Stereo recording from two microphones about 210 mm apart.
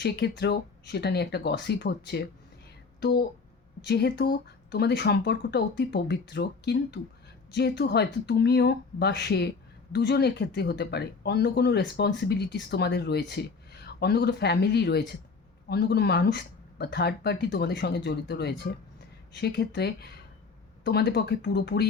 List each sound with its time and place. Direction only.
0.0 s speech: 50° left (ahead or behind)